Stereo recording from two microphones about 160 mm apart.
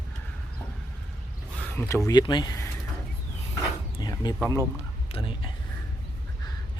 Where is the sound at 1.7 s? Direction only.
15° left (ahead or behind).